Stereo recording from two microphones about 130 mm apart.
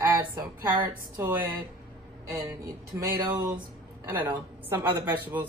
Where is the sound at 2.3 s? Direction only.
20° right (ahead or behind).